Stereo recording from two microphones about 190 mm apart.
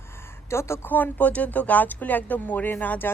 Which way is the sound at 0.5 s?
15° left (ahead or behind).